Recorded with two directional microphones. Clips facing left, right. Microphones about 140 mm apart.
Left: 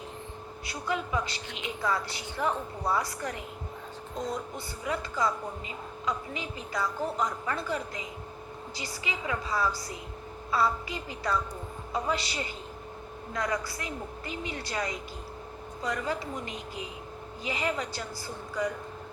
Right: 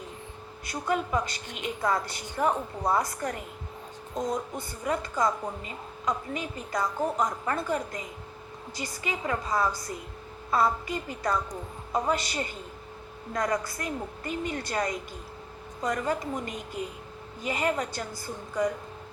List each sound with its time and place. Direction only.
0.6 s a woman's voice: 50° right (ahead or behind)
4.5 s a woman's voice: 50° right (ahead or behind)